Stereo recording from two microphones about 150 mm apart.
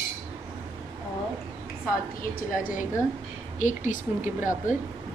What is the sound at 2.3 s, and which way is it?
A woman's voice, 65° left (ahead or behind).